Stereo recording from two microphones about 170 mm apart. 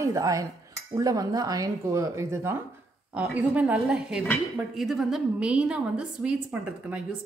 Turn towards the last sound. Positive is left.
turn(degrees=-5)  # may be behind; listen again after turning